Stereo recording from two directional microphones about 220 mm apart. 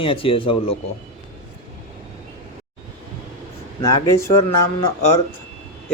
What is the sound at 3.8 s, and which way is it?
Speech, 15° left (ahead or behind).